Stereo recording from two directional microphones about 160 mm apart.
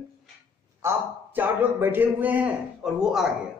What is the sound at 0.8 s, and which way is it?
A man's voice, 15° right (ahead or behind).